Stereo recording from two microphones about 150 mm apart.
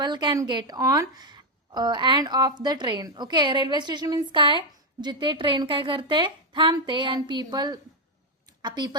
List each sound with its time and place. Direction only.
0.0 s a woman's voice: 30° right (ahead or behind)